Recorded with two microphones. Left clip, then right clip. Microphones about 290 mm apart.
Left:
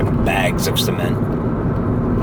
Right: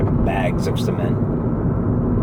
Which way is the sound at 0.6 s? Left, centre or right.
Centre.